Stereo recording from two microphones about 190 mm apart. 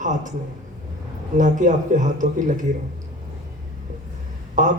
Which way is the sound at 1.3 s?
40° right (ahead or behind).